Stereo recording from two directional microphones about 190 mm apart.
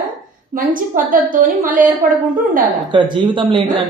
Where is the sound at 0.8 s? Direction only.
45° right (ahead or behind).